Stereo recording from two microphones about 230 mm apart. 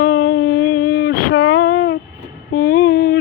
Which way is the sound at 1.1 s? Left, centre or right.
Left.